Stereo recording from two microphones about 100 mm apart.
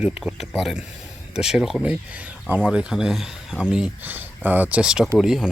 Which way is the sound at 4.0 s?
20° right (ahead or behind).